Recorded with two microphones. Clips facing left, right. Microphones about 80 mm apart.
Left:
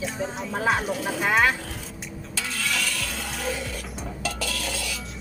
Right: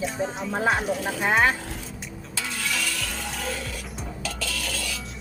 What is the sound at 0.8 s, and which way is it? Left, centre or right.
Speech, centre.